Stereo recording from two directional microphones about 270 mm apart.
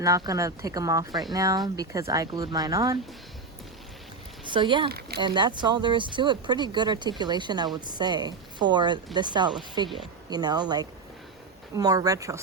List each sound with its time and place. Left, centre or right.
0.0 s speech: centre
4.4 s speech: centre
4.9 s speech: right
5.2 s speech: centre